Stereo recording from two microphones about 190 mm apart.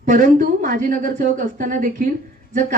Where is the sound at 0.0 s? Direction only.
45° right (ahead or behind).